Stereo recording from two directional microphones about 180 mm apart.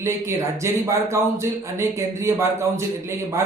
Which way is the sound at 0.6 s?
15° right (ahead or behind).